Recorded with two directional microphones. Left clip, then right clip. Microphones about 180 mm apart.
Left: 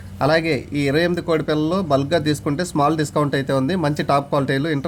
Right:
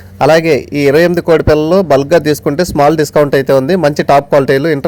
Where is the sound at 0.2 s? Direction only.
40° right (ahead or behind).